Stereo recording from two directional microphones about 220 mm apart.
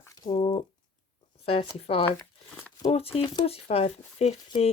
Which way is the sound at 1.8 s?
25° left (ahead or behind).